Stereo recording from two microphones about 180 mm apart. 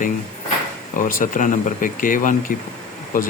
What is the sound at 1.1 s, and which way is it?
A man's voice, 45° left (ahead or behind).